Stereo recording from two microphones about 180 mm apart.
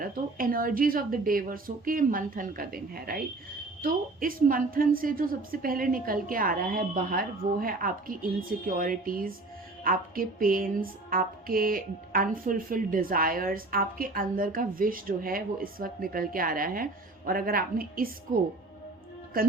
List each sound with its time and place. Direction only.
0.0 s speech: 50° right (ahead or behind)
19.3 s speech: 55° right (ahead or behind)